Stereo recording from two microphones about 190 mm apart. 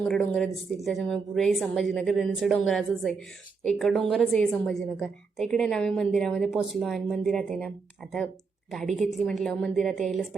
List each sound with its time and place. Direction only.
0.0 s a woman's voice: 5° left (ahead or behind)